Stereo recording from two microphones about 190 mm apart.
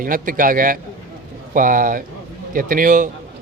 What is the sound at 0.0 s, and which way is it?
A man's voice, 45° right (ahead or behind).